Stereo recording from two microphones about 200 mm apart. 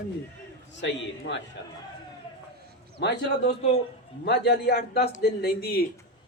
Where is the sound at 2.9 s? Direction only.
55° left (ahead or behind).